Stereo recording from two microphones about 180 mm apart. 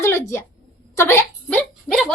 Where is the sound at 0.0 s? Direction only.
15° left (ahead or behind).